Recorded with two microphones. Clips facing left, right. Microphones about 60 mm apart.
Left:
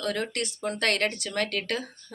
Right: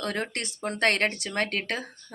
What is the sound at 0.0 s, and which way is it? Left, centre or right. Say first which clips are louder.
Speech: left 1 dB; right.